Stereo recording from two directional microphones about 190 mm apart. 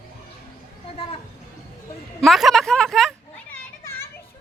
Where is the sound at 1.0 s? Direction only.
30° left (ahead or behind).